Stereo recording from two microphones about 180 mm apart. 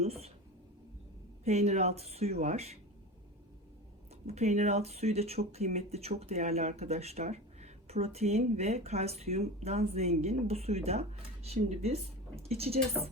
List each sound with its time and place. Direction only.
0.0 s a sound: 35° right (ahead or behind)
1.5 s speech: 35° right (ahead or behind)
4.3 s speech: 40° right (ahead or behind)